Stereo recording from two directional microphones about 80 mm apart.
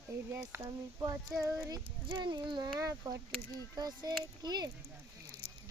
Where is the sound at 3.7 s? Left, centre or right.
Right.